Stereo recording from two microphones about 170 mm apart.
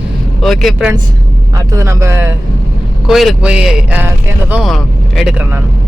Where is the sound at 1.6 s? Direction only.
20° right (ahead or behind).